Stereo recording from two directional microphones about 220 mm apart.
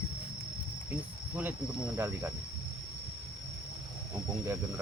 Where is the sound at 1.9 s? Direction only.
15° right (ahead or behind).